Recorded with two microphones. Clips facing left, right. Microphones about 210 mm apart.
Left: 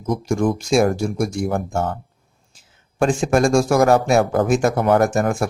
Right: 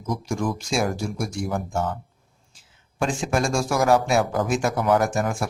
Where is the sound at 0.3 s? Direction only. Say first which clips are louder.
Left 9 dB; 50° left (ahead or behind).